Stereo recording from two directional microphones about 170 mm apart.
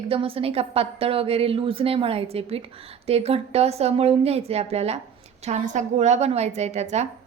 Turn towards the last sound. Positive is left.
turn(degrees=-40)  # may be behind; listen again after turning